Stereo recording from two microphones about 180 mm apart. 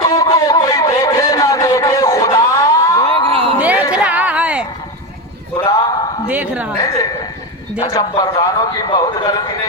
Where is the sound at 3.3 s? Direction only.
30° right (ahead or behind).